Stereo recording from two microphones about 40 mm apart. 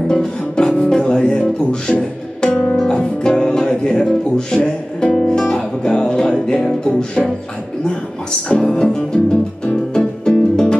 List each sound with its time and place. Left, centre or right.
0.1 s speech: centre
2.5 s music: centre
7.8 s speech: left
8.8 s music: left